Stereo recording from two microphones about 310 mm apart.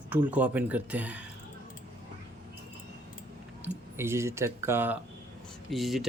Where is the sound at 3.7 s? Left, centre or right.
Centre.